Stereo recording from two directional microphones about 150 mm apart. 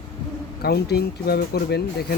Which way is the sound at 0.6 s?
90° left.